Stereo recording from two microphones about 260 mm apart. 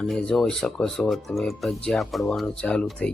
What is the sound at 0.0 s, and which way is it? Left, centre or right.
Speech, centre.